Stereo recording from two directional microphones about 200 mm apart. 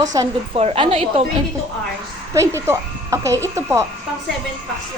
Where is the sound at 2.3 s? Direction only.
15° right (ahead or behind).